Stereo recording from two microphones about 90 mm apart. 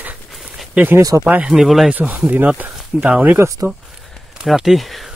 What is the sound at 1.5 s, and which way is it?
Speech, centre (ahead or behind).